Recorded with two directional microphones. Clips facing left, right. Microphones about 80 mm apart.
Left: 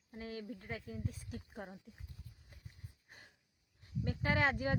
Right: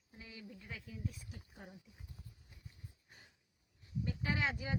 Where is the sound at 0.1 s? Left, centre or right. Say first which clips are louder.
Left 9 dB; left.